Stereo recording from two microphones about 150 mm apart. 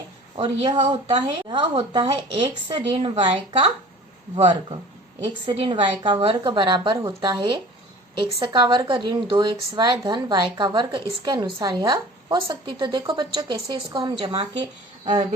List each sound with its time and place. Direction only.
0.3 s a woman's voice: 35° right (ahead or behind)